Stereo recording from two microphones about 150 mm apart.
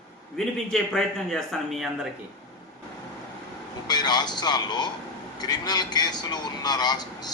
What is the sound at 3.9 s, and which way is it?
A man's voice, 30° left (ahead or behind).